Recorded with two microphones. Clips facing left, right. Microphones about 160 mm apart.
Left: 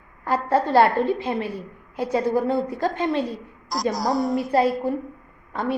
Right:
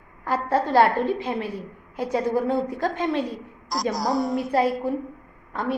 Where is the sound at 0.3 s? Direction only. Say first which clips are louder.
Left 2 dB; centre (ahead or behind).